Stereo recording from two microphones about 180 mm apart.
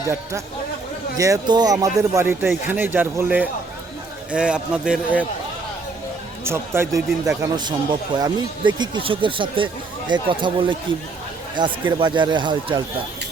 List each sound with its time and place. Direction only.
1.1 s a man's voice: 20° right (ahead or behind)
6.4 s speech: 15° right (ahead or behind)